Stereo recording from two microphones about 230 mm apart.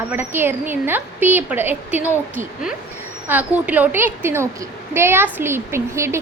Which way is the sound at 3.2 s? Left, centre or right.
Centre.